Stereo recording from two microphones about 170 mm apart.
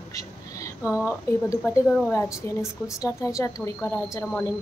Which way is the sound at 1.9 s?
5° left (ahead or behind).